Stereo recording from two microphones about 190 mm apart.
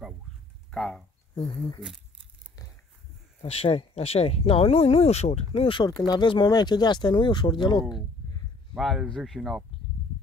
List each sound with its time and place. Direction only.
0.7 s speech: 5° left (ahead or behind)
1.3 s speech: 25° left (ahead or behind)
3.4 s speech: 30° left (ahead or behind)
8.7 s speech: centre (ahead or behind)